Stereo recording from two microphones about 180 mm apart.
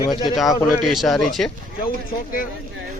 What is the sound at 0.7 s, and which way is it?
Speech, centre (ahead or behind).